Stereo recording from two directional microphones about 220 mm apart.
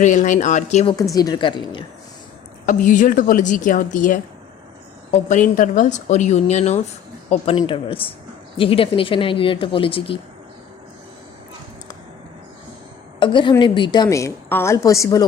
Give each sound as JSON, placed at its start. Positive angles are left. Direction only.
{"t": 0.0, "sound": "a woman's voice", "side_deg": 35}
{"t": 1.1, "sound": "a woman's voice", "side_deg": 15}
{"t": 2.6, "sound": "a woman's voice", "side_deg": 35}
{"t": 13.1, "sound": "a woman's voice", "side_deg": 20}